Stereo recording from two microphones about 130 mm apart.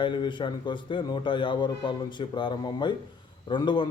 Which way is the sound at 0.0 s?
40° left (ahead or behind).